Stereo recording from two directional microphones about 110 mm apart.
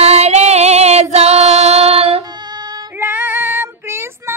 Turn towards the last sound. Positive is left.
turn(degrees=-20)  # may be behind; listen again after turning